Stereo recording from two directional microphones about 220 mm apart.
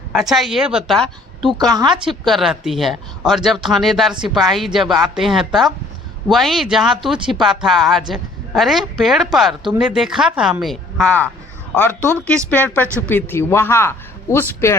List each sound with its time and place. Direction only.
0.1 s a woman's voice: centre (ahead or behind)
1.5 s a woman's voice: 15° right (ahead or behind)
2.0 s a woman's voice: centre (ahead or behind)